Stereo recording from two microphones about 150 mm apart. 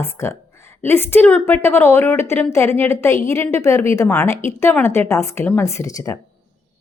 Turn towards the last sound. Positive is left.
turn(degrees=20)  # may be behind; listen again after turning